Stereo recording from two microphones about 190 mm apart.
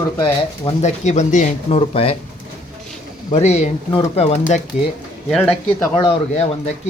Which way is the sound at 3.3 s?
35° left (ahead or behind).